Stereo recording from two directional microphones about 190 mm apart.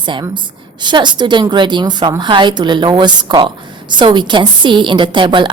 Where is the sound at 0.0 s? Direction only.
25° right (ahead or behind).